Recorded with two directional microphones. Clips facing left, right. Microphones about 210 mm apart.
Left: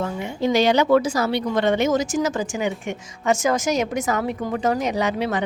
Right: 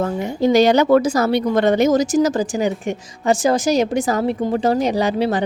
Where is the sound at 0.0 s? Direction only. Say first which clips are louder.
Right 5 dB; 40° right (ahead or behind).